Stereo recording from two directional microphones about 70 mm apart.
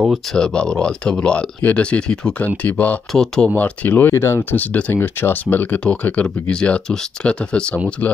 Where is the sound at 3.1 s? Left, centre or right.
Centre.